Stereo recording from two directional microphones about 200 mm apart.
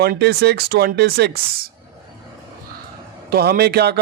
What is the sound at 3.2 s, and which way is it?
Speech, 50° right (ahead or behind).